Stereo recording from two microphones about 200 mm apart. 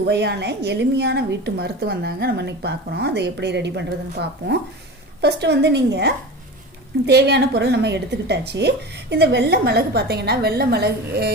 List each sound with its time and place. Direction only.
0.1 s a woman's voice: 55° right (ahead or behind)